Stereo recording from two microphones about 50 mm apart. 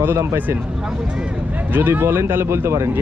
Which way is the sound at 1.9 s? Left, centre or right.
Right.